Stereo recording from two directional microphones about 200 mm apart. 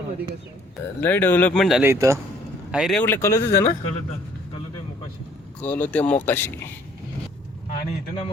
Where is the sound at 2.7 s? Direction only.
Centre (ahead or behind); by 3.7 s 15° left (ahead or behind).